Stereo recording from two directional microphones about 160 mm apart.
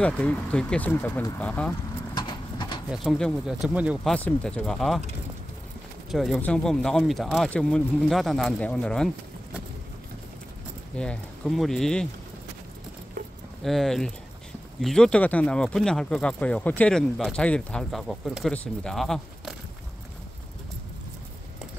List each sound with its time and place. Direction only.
0.0 s speech: 5° left (ahead or behind)
2.1 s clip-clop: 25° left (ahead or behind)
2.9 s speech: centre (ahead or behind)
4.1 s speech: 5° left (ahead or behind)
6.1 s speech: centre (ahead or behind)
11.0 s speech: 5° left (ahead or behind)
13.7 s speech: centre (ahead or behind)